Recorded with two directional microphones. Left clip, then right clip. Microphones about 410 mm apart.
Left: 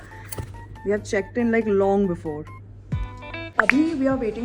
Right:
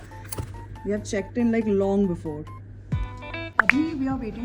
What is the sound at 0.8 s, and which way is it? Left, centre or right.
Speech, centre.